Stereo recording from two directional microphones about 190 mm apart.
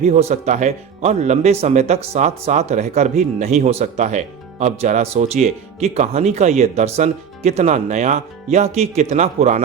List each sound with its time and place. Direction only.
0.0 s speech: 35° right (ahead or behind)